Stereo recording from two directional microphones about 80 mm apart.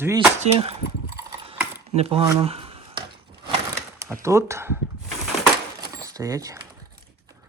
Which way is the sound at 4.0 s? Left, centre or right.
Right.